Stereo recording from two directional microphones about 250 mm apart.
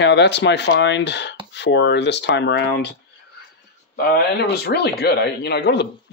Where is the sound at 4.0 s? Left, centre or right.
Left.